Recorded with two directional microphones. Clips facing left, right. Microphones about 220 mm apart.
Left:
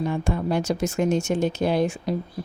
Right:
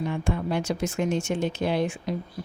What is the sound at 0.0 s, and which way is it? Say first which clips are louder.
Speech: left 3 dB; 40° left (ahead or behind).